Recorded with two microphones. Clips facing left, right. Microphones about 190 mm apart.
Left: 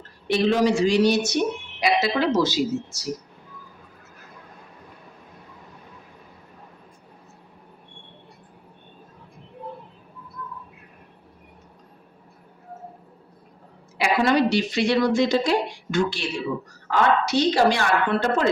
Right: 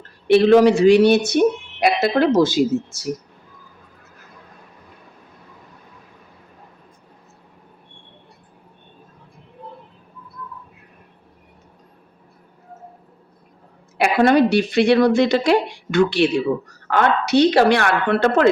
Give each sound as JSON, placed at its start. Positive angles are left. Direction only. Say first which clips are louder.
{"t": 0.3, "sound": "speech", "louder": "right 8 dB", "side_deg": -65}
{"t": 14.0, "sound": "speech", "louder": "right 5 dB", "side_deg": -55}